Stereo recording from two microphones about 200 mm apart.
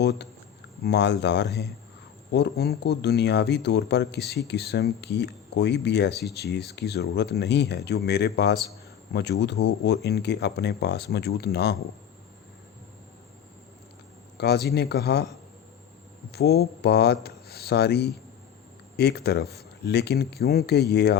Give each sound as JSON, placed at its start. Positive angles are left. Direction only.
{"t": 0.0, "sound": "speech", "side_deg": 55}
{"t": 14.3, "sound": "speech", "side_deg": 55}
{"t": 16.3, "sound": "speech", "side_deg": 50}